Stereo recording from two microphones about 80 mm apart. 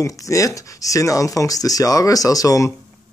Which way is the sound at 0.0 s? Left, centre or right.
Left.